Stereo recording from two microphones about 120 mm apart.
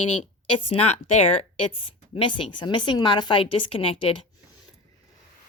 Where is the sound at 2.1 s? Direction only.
45° left (ahead or behind).